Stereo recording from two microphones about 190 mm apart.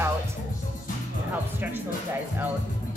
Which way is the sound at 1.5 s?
10° right (ahead or behind).